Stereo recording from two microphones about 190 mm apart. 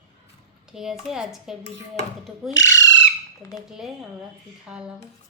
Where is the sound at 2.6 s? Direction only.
15° left (ahead or behind).